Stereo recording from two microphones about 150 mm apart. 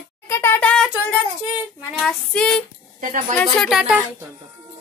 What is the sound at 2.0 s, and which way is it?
Speech, 5° left (ahead or behind).